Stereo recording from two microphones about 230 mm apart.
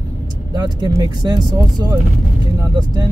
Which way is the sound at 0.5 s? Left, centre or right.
Centre.